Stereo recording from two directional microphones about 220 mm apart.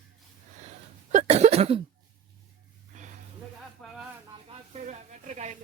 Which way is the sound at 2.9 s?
35° right (ahead or behind).